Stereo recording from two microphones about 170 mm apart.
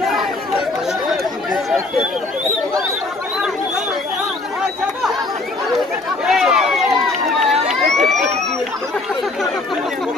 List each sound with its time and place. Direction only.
0.0 s chatter: centre (ahead or behind)
1.5 s chatter: centre (ahead or behind)
6.2 s run: 5° right (ahead or behind)